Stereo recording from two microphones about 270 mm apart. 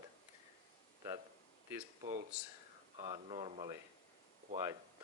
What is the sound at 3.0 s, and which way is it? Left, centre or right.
Speech, centre.